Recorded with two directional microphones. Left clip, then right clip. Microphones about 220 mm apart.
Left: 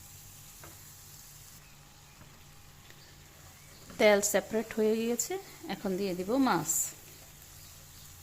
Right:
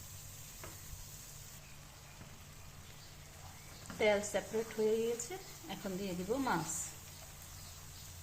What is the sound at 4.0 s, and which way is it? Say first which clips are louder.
Speech: left 8 dB; 55° left (ahead or behind).